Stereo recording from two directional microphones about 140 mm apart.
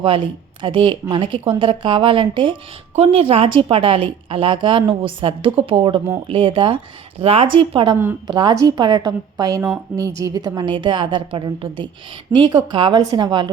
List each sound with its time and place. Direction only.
0.6 s a woman's voice: 40° right (ahead or behind)